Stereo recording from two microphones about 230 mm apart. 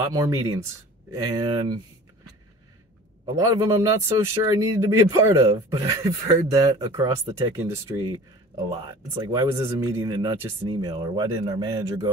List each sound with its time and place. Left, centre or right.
0.0 s speech: centre
3.3 s speech: centre